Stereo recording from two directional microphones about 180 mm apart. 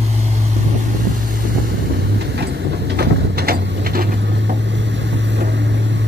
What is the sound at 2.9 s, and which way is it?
Mechanisms, 60° right (ahead or behind).